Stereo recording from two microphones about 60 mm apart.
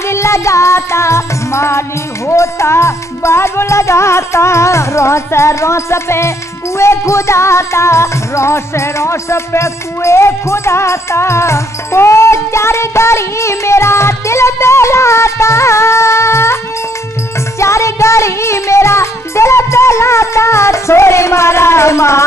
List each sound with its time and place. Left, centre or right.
0.0 s music: left
17.6 s music: left